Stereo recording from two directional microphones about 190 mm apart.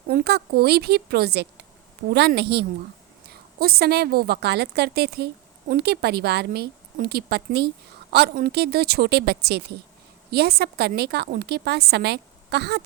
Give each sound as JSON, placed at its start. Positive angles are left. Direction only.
{"t": 0.1, "sound": "a woman's voice", "side_deg": -55}